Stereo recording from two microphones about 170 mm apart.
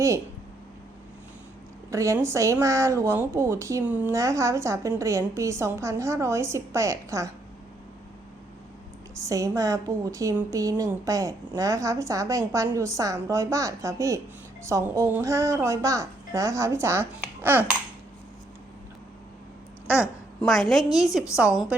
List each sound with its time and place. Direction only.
1.9 s speech: 20° right (ahead or behind)
9.1 s a woman's voice: 20° right (ahead or behind)
20.0 s a woman's voice: centre (ahead or behind)